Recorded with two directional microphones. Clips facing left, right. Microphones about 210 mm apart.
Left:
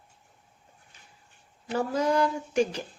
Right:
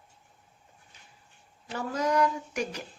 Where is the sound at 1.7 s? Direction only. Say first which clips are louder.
Left 2 dB; 30° left (ahead or behind).